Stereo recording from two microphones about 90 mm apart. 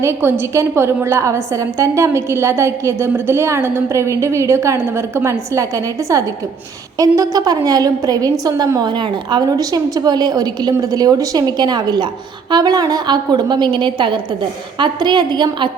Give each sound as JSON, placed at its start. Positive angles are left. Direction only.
{"t": 0.0, "sound": "a woman's voice", "side_deg": -30}
{"t": 8.9, "sound": "a woman's voice", "side_deg": -55}